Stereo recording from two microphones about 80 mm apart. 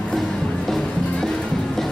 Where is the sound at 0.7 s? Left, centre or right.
Centre.